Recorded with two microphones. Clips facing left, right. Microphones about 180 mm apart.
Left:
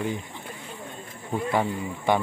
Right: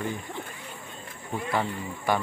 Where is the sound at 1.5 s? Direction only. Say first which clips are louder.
Left 3 dB; 15° left (ahead or behind).